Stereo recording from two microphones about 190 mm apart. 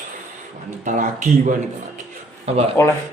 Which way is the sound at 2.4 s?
35° right (ahead or behind).